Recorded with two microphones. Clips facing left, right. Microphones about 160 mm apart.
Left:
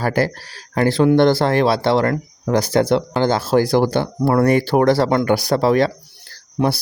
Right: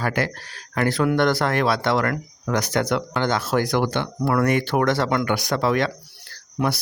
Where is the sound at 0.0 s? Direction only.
35° left (ahead or behind).